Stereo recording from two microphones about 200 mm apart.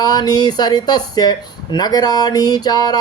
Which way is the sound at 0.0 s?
20° left (ahead or behind).